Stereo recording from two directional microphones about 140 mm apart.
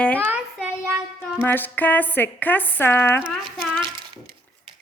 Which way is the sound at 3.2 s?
5° right (ahead or behind).